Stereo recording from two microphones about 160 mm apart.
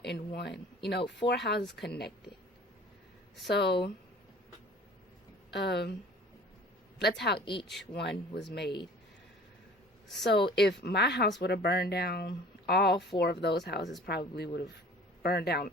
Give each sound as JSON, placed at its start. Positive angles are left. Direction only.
{"t": 0.9, "sound": "speech", "side_deg": 90}
{"t": 3.5, "sound": "speech", "side_deg": 90}
{"t": 5.5, "sound": "speech", "side_deg": 90}
{"t": 7.0, "sound": "speech", "side_deg": 90}
{"t": 7.4, "sound": "speech", "side_deg": 30}
{"t": 7.9, "sound": "speech", "side_deg": 90}
{"t": 10.2, "sound": "a man's voice", "side_deg": 90}